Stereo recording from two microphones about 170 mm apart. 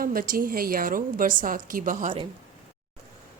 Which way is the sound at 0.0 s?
55° right (ahead or behind).